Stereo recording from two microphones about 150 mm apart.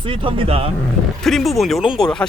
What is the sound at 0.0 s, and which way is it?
Speech, 35° right (ahead or behind).